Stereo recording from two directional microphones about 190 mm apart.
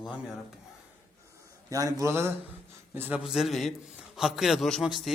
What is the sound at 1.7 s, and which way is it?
A man's voice, 15° right (ahead or behind).